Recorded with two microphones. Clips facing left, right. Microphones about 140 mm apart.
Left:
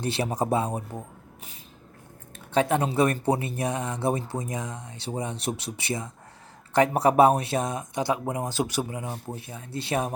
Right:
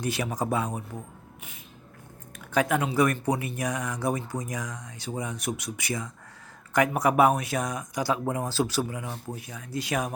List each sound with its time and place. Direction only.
0.0 s speech: 30° left (ahead or behind)
2.5 s speech: 30° left (ahead or behind)